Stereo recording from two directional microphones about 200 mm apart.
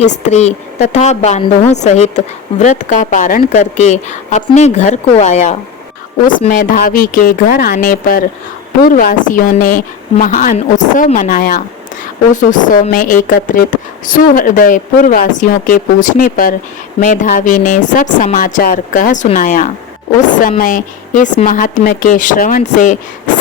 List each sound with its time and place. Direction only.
0.0 s a woman's voice: 35° left (ahead or behind)